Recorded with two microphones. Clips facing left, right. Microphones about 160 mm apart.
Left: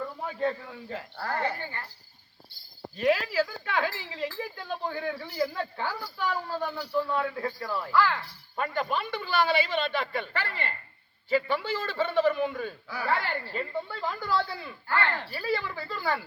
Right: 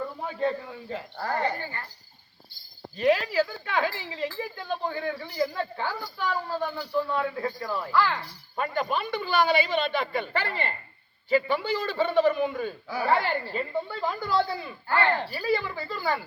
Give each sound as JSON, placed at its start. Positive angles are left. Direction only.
{"t": 0.0, "sound": "a man's voice", "side_deg": 0}
{"t": 1.2, "sound": "speech", "side_deg": -15}
{"t": 3.0, "sound": "a woman's voice", "side_deg": 5}
{"t": 10.3, "sound": "speech", "side_deg": -30}
{"t": 11.3, "sound": "a woman's voice", "side_deg": 0}
{"t": 13.0, "sound": "speech", "side_deg": -25}
{"t": 13.5, "sound": "speech", "side_deg": -5}
{"t": 14.8, "sound": "speech", "side_deg": -25}
{"t": 15.3, "sound": "a woman's voice", "side_deg": -5}